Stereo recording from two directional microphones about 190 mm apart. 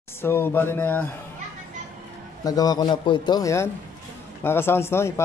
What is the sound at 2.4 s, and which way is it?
A man's voice, 20° left (ahead or behind).